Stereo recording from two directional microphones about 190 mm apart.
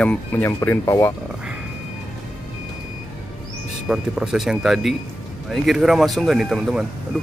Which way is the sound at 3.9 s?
5° right (ahead or behind).